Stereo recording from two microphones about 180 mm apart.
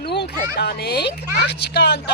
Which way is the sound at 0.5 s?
65° left (ahead or behind).